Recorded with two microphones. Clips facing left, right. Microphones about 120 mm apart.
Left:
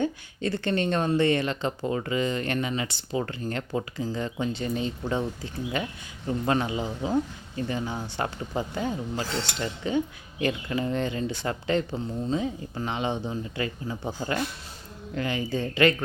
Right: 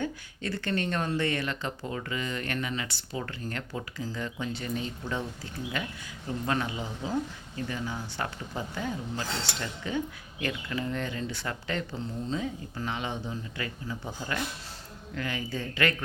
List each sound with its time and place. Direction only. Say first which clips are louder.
0.0 s speech: left 6 dB; 25° left (ahead or behind)
6.4 s speech: left 5 dB; 25° left (ahead or behind)